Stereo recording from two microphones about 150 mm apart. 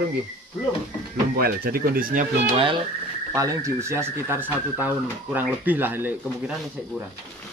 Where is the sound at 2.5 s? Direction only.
35° right (ahead or behind).